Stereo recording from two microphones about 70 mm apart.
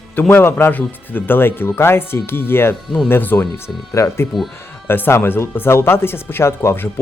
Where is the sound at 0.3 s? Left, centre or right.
Left.